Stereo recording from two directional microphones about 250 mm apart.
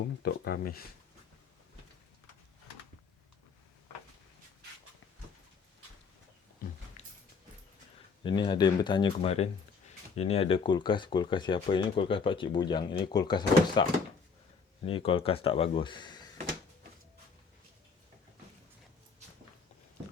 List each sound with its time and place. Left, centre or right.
0.2 s speech: left
7.0 s a sound: left
8.2 s speech: centre
14.8 s speech: left